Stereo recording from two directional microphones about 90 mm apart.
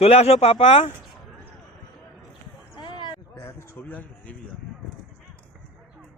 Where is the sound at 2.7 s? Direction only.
60° left (ahead or behind).